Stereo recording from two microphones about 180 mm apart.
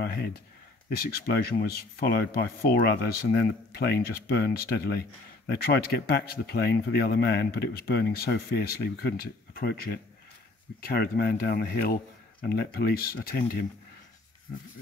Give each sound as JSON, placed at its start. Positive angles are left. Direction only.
{"t": 0.0, "sound": "speech", "side_deg": 60}